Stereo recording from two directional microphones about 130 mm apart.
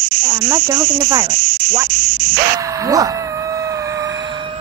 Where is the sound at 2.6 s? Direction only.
25° right (ahead or behind).